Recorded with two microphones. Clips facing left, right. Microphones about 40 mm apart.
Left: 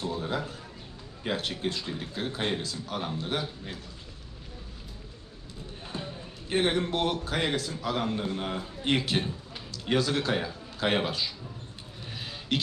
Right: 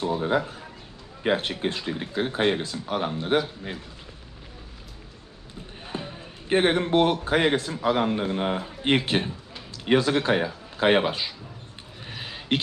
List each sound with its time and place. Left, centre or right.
0.0 s speech: right
5.8 s a man's voice: right
12.0 s a sound: right